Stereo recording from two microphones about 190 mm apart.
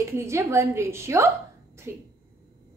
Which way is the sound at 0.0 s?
15° right (ahead or behind).